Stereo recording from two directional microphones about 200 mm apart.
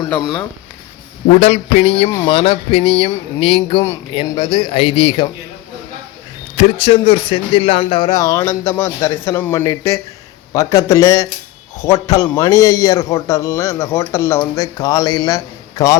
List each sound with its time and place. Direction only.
0.1 s speech: centre (ahead or behind)
1.4 s speech: 35° left (ahead or behind)
6.6 s a man's voice: 30° left (ahead or behind); by 16.0 s 15° left (ahead or behind)